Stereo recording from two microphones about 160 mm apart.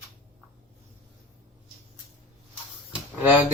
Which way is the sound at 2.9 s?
10° right (ahead or behind).